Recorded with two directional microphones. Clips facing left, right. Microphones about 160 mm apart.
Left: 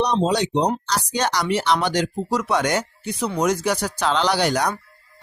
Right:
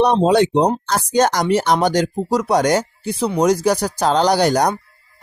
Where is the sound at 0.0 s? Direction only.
55° right (ahead or behind).